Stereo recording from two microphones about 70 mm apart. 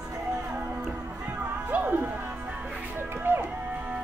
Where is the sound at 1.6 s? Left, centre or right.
Right.